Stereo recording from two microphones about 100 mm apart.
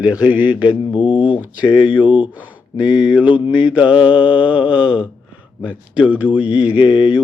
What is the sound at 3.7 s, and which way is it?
Mantra, 10° right (ahead or behind).